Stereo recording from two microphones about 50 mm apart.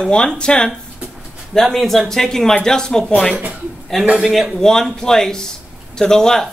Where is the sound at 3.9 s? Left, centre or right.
Centre.